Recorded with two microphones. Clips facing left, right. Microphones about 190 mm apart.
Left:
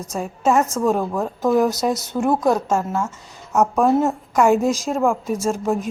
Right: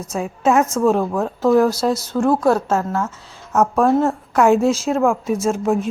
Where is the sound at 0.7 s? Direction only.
10° left (ahead or behind).